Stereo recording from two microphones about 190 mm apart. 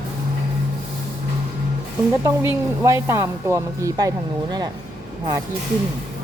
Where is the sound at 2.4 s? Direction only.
15° right (ahead or behind).